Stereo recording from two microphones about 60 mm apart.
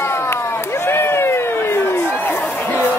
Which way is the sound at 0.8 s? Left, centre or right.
Left.